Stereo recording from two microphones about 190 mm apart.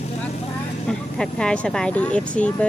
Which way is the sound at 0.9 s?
5° left (ahead or behind).